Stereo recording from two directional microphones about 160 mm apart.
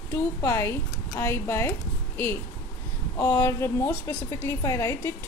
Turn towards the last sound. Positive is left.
turn(degrees=20)  # may be behind; listen again after turning